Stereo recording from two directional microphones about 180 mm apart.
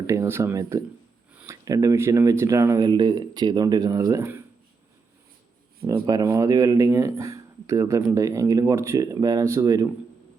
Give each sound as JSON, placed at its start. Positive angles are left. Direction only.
{"t": 0.1, "sound": "speech", "side_deg": -15}
{"t": 5.8, "sound": "speech", "side_deg": -20}